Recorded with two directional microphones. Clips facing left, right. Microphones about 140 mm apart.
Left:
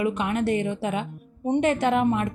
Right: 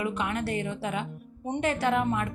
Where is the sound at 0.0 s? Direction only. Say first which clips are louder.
Left 5 dB; 20° left (ahead or behind).